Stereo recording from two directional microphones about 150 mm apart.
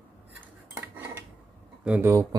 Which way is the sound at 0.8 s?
15° right (ahead or behind).